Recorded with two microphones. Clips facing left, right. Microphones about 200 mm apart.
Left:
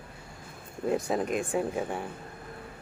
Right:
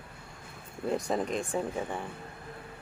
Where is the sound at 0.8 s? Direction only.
5° left (ahead or behind).